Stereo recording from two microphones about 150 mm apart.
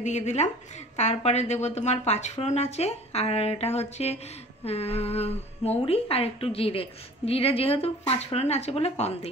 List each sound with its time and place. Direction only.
0.0 s a woman's voice: 50° left (ahead or behind)